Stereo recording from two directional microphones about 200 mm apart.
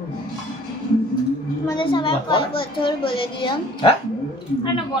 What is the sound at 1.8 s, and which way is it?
A woman's voice, 25° left (ahead or behind).